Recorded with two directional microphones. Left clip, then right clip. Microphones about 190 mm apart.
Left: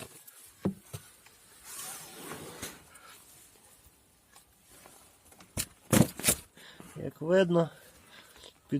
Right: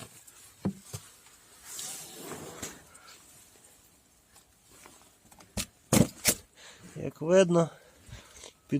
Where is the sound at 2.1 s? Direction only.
20° right (ahead or behind).